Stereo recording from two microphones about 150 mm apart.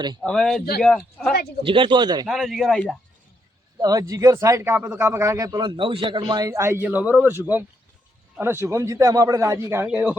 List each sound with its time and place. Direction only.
0.2 s speech: 5° left (ahead or behind)
1.6 s speech: 35° right (ahead or behind)
2.2 s speech: centre (ahead or behind)
3.8 s a man's voice: 25° right (ahead or behind)